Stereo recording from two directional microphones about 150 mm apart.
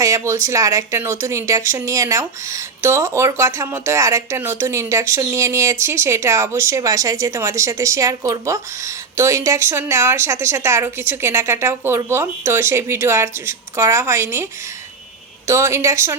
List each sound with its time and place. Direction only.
0.0 s a woman's voice: 20° right (ahead or behind)
15.4 s speech: 20° right (ahead or behind)